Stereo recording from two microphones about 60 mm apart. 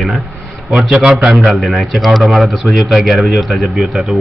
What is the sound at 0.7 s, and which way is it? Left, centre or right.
A man's voice, centre.